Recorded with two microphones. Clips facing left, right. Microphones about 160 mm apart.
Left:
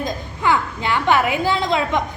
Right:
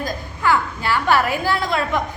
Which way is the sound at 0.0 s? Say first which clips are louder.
Left 1 dB; 20° left (ahead or behind).